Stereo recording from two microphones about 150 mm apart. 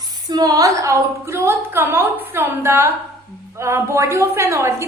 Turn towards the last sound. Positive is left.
turn(degrees=-20)  # may be behind; listen again after turning